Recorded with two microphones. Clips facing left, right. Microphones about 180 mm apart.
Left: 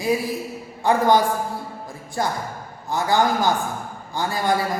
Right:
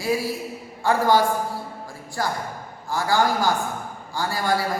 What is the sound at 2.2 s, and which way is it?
A woman's voice, 20° left (ahead or behind).